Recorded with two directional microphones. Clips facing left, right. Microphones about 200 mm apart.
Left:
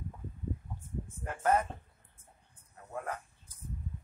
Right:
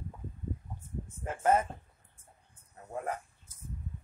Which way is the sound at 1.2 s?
20° right (ahead or behind).